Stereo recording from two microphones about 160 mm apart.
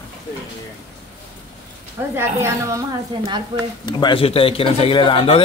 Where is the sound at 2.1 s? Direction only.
20° right (ahead or behind).